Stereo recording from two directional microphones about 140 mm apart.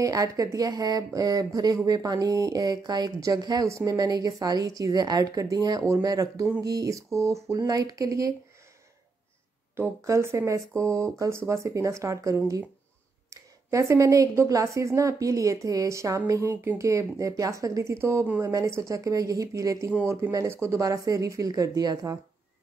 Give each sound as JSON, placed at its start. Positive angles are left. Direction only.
{"t": 0.0, "sound": "speech", "side_deg": -25}
{"t": 9.8, "sound": "speech", "side_deg": -20}
{"t": 19.9, "sound": "speech", "side_deg": -10}
{"t": 20.2, "sound": "speech", "side_deg": -20}